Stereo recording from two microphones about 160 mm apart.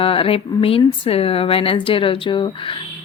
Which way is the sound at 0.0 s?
35° left (ahead or behind).